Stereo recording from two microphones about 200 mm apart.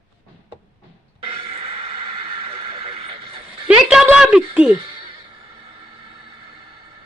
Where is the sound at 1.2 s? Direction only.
30° right (ahead or behind).